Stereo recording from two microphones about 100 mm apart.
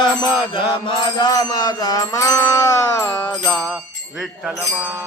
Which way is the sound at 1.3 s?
40° left (ahead or behind).